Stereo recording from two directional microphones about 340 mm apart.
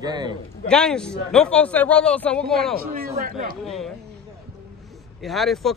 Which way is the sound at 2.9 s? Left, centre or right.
Right.